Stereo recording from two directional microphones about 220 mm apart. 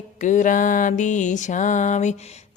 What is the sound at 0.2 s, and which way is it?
Mantra, 35° left (ahead or behind).